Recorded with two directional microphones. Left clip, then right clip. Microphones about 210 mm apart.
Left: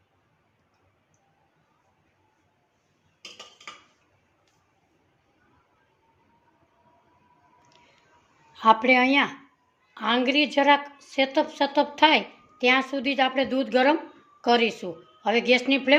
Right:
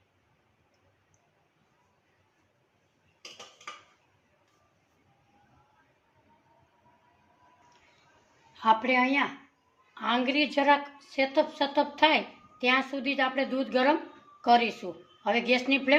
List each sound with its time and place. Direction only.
8.5 s a woman's voice: 35° left (ahead or behind)